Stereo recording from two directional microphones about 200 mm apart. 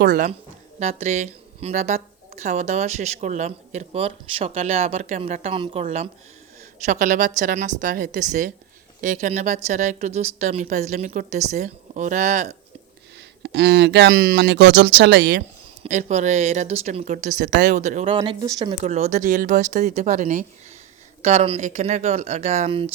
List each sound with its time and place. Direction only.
0.0 s speech: 45° right (ahead or behind)
0.8 s a woman's voice: 35° right (ahead or behind)
13.4 s speech: 55° right (ahead or behind)
15.8 s a woman's voice: 35° right (ahead or behind)
18.2 s a woman's voice: 20° right (ahead or behind)